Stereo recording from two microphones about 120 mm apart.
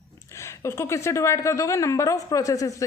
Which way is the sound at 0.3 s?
25° left (ahead or behind).